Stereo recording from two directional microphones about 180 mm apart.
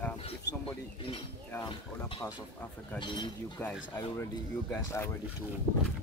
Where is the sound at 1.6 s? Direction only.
25° left (ahead or behind).